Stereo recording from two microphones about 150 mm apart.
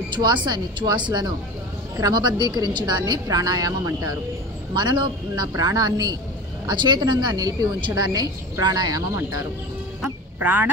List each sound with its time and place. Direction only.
0.1 s a woman's voice: 30° right (ahead or behind)
10.4 s speech: 10° right (ahead or behind)